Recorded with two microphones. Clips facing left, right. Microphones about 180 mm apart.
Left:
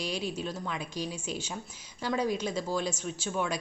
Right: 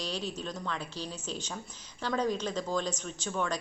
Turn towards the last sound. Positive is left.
turn(degrees=10)  # may be behind; listen again after turning